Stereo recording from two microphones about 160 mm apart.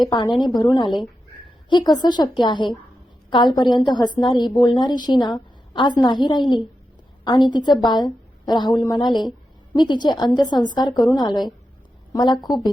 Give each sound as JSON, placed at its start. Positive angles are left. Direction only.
{"t": 0.0, "sound": "a woman's voice", "side_deg": 25}
{"t": 1.7, "sound": "a woman's voice", "side_deg": 25}